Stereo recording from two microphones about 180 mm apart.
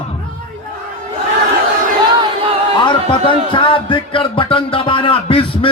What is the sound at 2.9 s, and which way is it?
Speech, 30° left (ahead or behind).